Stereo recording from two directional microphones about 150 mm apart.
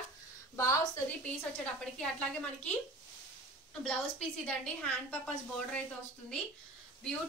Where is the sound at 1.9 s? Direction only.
10° left (ahead or behind).